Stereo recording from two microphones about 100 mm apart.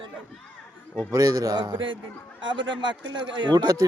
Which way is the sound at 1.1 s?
35° right (ahead or behind).